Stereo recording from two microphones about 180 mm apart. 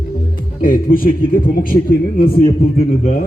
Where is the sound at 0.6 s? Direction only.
50° left (ahead or behind).